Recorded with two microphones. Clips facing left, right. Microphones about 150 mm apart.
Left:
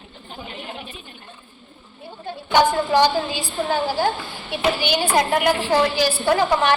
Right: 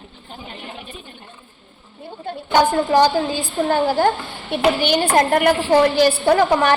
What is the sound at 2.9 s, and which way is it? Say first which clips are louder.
A woman's voice: right 3 dB; 45° right (ahead or behind).